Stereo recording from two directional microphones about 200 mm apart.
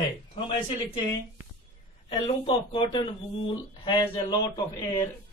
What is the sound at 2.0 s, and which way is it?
Speech, 25° left (ahead or behind).